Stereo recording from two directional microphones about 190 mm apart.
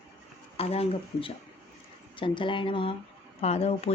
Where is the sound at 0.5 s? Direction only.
30° left (ahead or behind).